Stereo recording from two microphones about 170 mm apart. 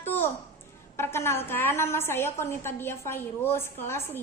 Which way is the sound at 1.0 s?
15° left (ahead or behind).